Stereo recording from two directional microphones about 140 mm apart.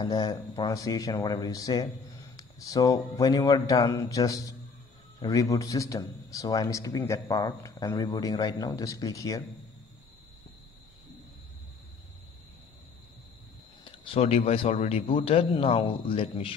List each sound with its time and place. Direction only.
0.0 s a man's voice: 25° left (ahead or behind)
13.8 s speech: 40° left (ahead or behind)